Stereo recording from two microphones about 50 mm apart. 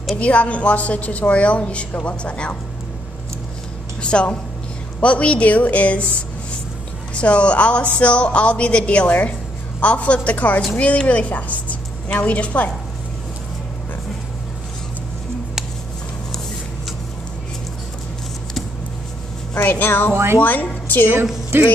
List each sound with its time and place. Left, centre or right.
0.1 s speech: left
4.0 s a woman's voice: left
7.2 s speech: left
19.5 s a woman's voice: left
21.5 s speech: right